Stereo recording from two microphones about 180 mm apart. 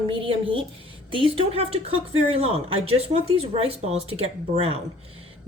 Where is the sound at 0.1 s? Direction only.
30° right (ahead or behind).